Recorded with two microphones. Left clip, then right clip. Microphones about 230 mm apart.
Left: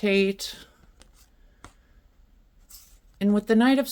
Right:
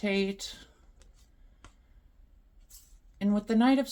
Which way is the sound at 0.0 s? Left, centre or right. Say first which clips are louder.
Left 8 dB; left.